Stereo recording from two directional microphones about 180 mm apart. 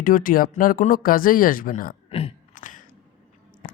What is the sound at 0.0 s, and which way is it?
Speech, 50° left (ahead or behind).